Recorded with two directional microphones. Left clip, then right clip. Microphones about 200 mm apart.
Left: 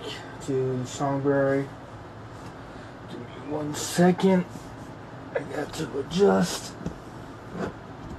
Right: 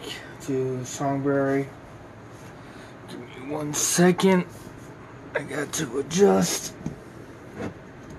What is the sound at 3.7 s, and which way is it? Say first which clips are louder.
Speech: right 2 dB; 30° right (ahead or behind).